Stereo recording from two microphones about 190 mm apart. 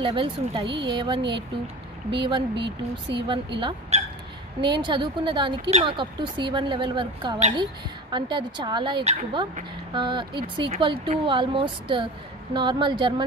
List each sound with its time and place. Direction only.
0.0 s a woman's voice: 25° right (ahead or behind)